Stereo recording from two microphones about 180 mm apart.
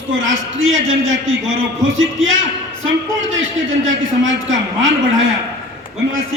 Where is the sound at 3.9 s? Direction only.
90° right.